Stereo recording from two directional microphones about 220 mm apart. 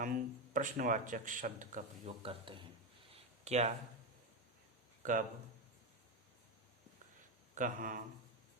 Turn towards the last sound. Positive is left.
turn(degrees=-35)  # may be behind; listen again after turning